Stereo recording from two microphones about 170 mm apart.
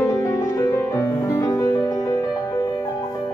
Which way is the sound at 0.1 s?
15° left (ahead or behind).